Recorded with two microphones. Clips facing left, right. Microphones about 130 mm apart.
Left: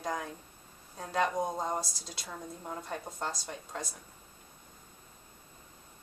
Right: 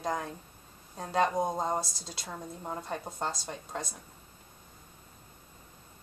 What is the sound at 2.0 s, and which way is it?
Speech, 5° left (ahead or behind).